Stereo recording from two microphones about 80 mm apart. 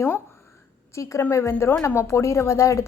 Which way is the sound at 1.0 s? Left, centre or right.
Left.